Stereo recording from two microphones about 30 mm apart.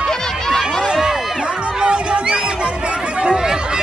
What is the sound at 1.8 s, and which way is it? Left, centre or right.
Music, right.